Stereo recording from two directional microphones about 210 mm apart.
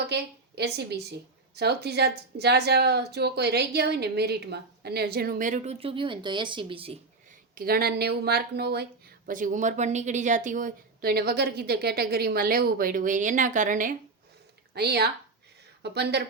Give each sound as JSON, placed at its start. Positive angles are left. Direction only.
{"t": 0.1, "sound": "a woman's voice", "side_deg": -50}
{"t": 7.5, "sound": "speech", "side_deg": -45}
{"t": 14.8, "sound": "speech", "side_deg": -50}